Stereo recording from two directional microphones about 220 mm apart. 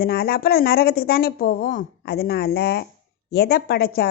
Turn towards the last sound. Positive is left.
turn(degrees=45)  # may be behind; listen again after turning